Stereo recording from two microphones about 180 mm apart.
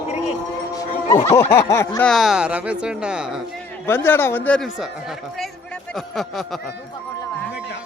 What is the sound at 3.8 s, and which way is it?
A man's voice, 10° left (ahead or behind).